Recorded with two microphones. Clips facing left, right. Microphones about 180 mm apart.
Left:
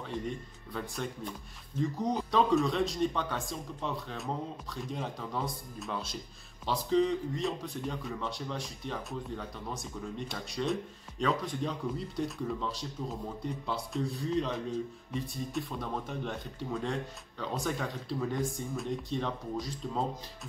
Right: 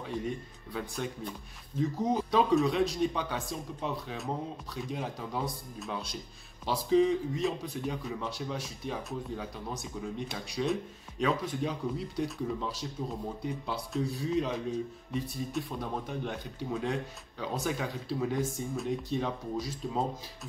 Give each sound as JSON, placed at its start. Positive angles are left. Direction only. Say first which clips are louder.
{"t": 0.7, "sound": "a man's voice", "louder": "right 1 dB", "side_deg": -5}